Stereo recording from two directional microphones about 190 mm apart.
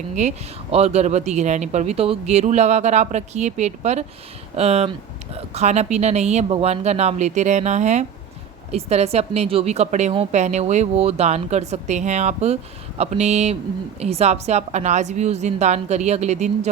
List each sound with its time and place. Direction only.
0.2 s speech: 35° right (ahead or behind)